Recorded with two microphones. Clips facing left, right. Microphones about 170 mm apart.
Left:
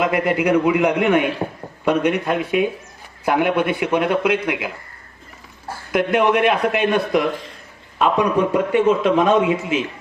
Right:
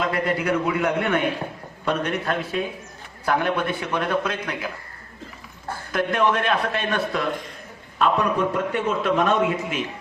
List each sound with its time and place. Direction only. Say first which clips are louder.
0.0 s speech: left 5 dB; 10° left (ahead or behind)
3.8 s speech: left 6 dB; 25° left (ahead or behind)
4.1 s speech: left 6 dB; 10° left (ahead or behind)